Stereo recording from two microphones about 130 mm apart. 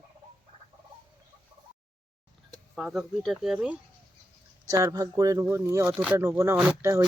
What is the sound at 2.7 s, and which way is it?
Speech, 5° right (ahead or behind).